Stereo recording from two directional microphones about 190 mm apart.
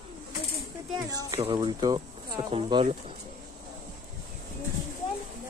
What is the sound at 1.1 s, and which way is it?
Speech, 20° right (ahead or behind).